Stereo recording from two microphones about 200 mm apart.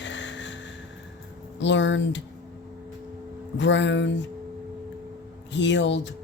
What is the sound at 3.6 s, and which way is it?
Speech, 65° left (ahead or behind).